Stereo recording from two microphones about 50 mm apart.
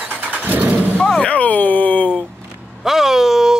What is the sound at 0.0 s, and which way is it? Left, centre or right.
Vehicle, right.